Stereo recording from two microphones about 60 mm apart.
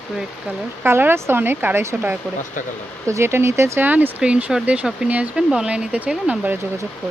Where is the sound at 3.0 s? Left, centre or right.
Right.